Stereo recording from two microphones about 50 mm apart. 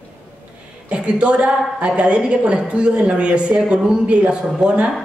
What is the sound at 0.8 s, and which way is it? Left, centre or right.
A woman's voice, right.